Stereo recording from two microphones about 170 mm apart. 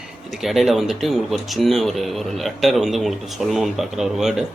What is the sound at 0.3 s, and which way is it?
Speech, centre (ahead or behind).